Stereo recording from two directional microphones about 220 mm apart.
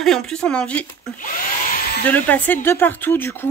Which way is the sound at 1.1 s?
40° left (ahead or behind).